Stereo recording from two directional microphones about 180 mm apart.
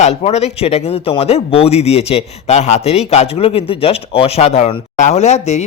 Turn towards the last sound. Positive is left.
turn(degrees=40)  # may be behind; listen again after turning